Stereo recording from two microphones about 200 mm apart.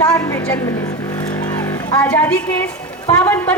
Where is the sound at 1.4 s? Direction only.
15° left (ahead or behind).